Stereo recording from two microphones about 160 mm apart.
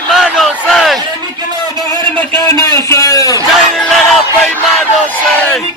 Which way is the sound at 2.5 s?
20° left (ahead or behind).